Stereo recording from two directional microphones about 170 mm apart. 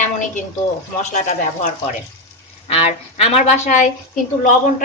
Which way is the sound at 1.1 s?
45° left (ahead or behind).